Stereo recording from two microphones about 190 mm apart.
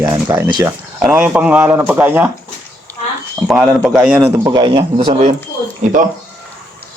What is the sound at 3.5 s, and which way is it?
Speech, 5° right (ahead or behind).